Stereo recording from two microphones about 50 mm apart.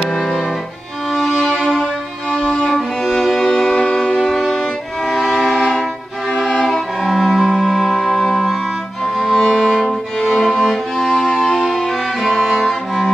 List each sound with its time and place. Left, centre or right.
0.0 s violin: centre
1.1 s violin: centre
1.5 s music: centre
2.3 s violin: centre
2.6 s music: centre
4.3 s music: centre
5.0 s violin: centre
6.3 s violin: centre
7.0 s music: centre